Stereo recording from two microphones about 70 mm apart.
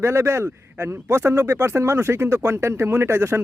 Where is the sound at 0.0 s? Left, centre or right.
Right.